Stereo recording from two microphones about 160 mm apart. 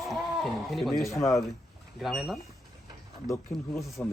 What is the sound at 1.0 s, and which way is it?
Speech, 20° left (ahead or behind).